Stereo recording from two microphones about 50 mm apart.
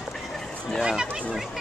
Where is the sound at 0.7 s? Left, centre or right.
Centre.